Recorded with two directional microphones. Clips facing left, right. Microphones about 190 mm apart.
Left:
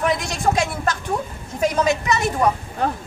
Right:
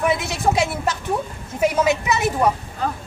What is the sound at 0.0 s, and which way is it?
A woman's voice, 5° right (ahead or behind).